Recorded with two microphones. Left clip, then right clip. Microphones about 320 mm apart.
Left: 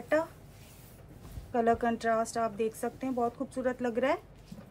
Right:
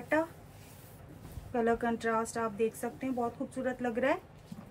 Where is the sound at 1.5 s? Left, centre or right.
Centre.